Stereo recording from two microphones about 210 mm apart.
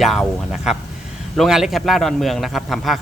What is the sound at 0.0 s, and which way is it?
A man's voice, centre (ahead or behind).